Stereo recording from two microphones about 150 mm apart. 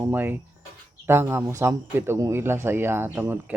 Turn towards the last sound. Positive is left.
turn(degrees=-15)  # may be behind; listen again after turning